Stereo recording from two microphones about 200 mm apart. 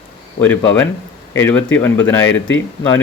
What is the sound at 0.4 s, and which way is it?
A man's voice, 10° left (ahead or behind).